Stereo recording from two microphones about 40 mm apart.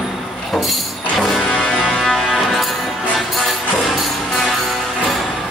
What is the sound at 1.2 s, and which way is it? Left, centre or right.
Music, centre.